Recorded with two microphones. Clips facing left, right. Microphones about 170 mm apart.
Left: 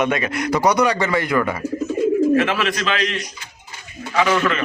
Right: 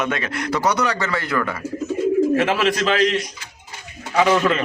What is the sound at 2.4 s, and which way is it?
Speech, 35° right (ahead or behind).